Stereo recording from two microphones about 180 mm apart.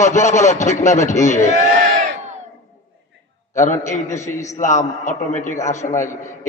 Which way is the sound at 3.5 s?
40° left (ahead or behind).